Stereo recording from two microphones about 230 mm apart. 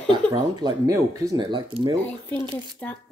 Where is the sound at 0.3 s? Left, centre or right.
Centre.